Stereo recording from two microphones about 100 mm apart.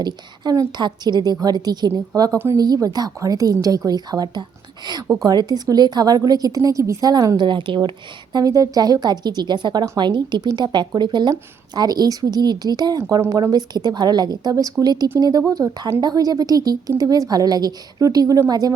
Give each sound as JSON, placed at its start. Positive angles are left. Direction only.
{"t": 0.0, "sound": "a woman's voice", "side_deg": -40}
{"t": 7.4, "sound": "a woman's voice", "side_deg": -55}